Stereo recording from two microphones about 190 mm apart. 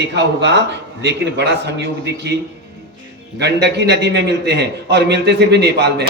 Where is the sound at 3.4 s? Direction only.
65° right (ahead or behind).